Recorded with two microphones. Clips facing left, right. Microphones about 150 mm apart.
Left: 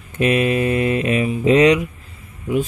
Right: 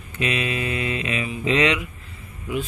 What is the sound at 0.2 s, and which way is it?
Speech, 45° left (ahead or behind).